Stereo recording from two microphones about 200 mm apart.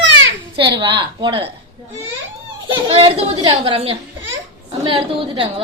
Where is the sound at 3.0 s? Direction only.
25° right (ahead or behind).